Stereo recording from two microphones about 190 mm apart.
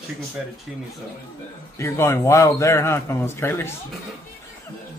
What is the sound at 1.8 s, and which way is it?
A man's voice, 15° left (ahead or behind).